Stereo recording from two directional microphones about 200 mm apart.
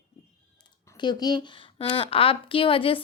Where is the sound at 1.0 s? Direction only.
20° left (ahead or behind).